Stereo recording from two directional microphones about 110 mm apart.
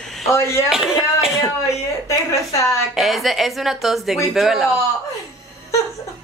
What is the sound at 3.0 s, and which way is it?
Speech, centre (ahead or behind).